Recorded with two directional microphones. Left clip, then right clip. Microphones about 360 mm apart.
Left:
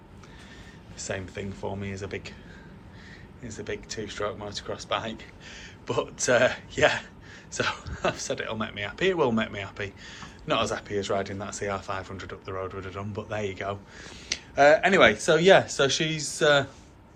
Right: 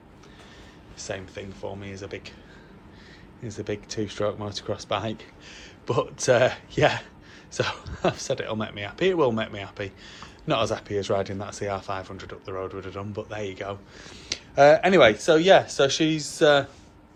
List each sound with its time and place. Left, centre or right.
0.9 s speech: centre
3.4 s speech: centre